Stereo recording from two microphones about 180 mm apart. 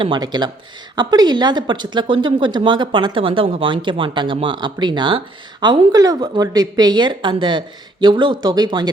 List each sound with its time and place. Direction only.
0.0 s speech: 25° right (ahead or behind)